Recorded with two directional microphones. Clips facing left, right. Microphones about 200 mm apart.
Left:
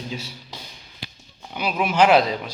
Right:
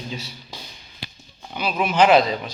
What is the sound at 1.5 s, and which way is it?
Speech, 10° left (ahead or behind).